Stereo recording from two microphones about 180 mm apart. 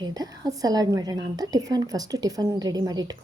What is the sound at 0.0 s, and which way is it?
A woman's voice, 20° right (ahead or behind).